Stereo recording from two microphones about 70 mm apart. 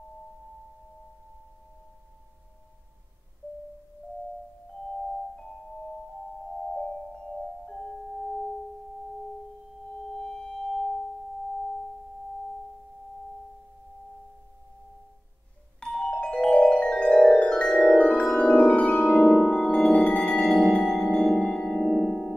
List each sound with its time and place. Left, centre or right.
7.6 s music: centre
10.1 s singing bowl: centre
15.8 s music: centre
21.2 s music: centre